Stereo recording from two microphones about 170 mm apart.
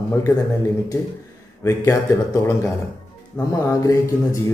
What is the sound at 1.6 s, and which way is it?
Speech, 20° left (ahead or behind).